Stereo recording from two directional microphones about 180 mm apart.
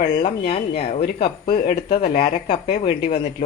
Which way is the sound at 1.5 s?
60° left (ahead or behind).